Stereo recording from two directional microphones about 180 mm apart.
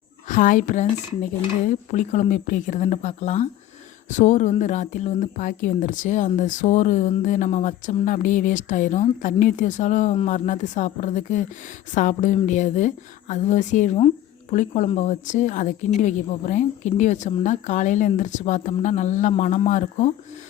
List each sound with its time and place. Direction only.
0.3 s a woman's voice: 45° left (ahead or behind)